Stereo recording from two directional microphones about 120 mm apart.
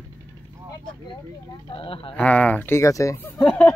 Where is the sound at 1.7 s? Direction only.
50° left (ahead or behind).